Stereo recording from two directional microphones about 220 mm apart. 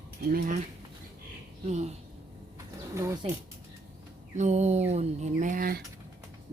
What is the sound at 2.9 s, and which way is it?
Speech, 15° right (ahead or behind).